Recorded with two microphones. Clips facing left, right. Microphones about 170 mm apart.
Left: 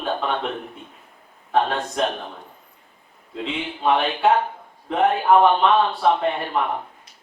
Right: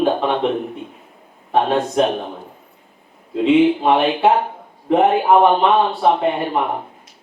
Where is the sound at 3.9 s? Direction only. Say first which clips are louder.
Right 4 dB; 15° right (ahead or behind).